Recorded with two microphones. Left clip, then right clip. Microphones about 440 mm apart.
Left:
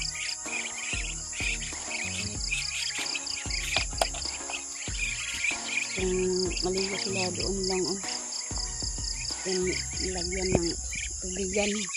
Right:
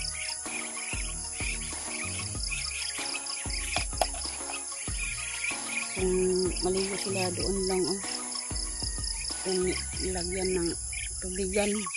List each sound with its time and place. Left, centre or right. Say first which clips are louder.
3.5 s music: left 2 dB; right
5.8 s music: right 3 dB; right
9.5 s speech: even; right